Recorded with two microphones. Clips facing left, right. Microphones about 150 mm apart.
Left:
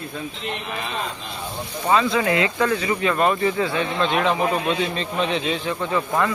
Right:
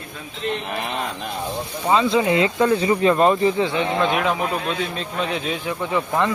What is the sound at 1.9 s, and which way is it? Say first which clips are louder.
Speech: right 2 dB; 25° right (ahead or behind).